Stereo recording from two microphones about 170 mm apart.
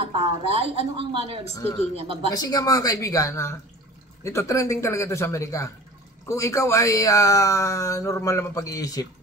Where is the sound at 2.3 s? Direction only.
20° left (ahead or behind).